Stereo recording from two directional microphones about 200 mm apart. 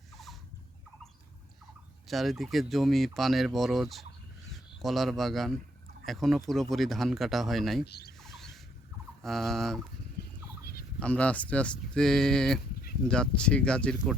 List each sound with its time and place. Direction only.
2.0 s speech: centre (ahead or behind)
7.9 s speech: 55° left (ahead or behind)
8.2 s a sound: centre (ahead or behind)
9.2 s speech: centre (ahead or behind)
11.0 s speech: 5° left (ahead or behind)